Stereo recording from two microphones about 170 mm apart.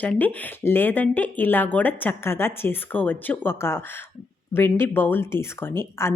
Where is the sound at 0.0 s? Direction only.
10° left (ahead or behind).